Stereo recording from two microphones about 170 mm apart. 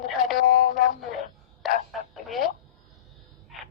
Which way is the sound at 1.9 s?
Centre (ahead or behind).